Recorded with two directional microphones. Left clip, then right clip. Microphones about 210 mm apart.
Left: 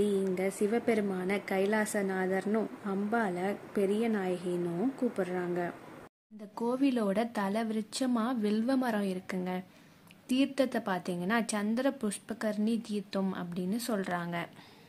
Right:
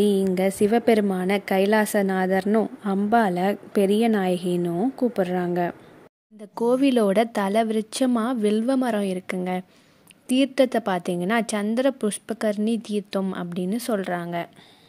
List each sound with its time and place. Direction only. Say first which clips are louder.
0.0 s a woman's voice: right 9 dB; 40° right (ahead or behind)